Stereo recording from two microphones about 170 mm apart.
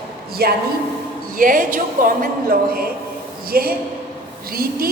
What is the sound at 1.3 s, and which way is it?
A woman's voice, 55° right (ahead or behind).